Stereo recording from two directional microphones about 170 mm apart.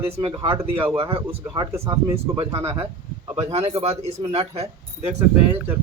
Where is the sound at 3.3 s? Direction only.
40° right (ahead or behind).